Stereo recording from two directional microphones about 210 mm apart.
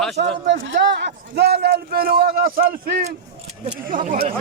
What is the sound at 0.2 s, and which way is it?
A man's voice, 60° right (ahead or behind).